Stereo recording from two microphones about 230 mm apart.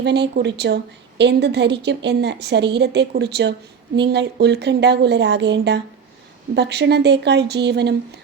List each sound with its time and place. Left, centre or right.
0.0 s a woman's voice: right